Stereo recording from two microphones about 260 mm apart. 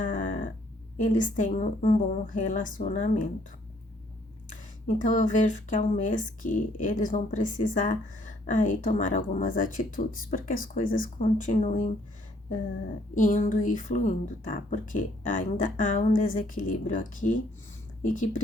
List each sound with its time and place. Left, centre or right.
0.0 s a sound: left
0.9 s speech: left
4.9 s speech: left
13.1 s speech: left